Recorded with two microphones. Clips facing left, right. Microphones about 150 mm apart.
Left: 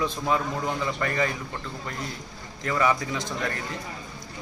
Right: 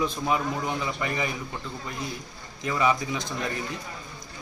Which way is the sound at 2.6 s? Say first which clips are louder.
Even; 15° right (ahead or behind).